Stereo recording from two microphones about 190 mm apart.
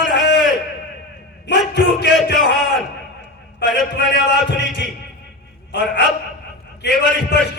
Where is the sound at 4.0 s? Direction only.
65° left (ahead or behind).